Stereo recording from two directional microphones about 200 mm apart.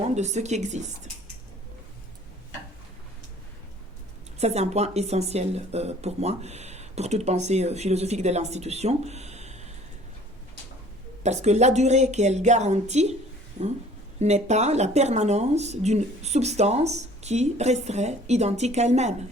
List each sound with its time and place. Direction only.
0.1 s speech: 35° right (ahead or behind)
4.4 s speech: 30° right (ahead or behind)
11.2 s speech: 35° right (ahead or behind)
14.2 s speech: 35° right (ahead or behind)